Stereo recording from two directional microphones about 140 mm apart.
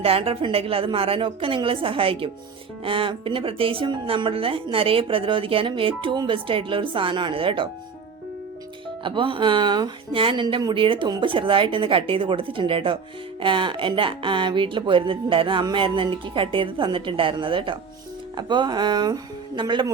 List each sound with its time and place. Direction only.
0.0 s speech: 40° right (ahead or behind)
9.0 s speech: 35° right (ahead or behind)